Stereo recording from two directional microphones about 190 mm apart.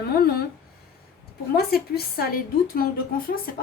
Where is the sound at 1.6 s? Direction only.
55° left (ahead or behind).